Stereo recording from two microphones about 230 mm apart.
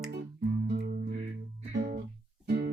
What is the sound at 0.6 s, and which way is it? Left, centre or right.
Music, right.